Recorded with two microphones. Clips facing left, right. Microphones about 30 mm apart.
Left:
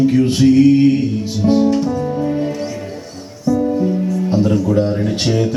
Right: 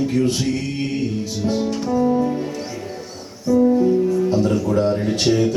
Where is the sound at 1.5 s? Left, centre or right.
Centre.